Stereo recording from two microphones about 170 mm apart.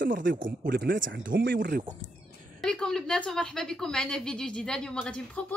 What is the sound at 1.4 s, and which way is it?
Speech, 75° right (ahead or behind).